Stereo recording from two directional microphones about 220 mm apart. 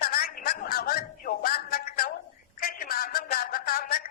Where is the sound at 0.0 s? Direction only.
40° left (ahead or behind).